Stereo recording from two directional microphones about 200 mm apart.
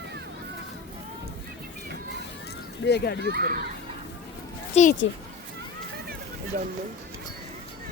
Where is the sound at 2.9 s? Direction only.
55° left (ahead or behind).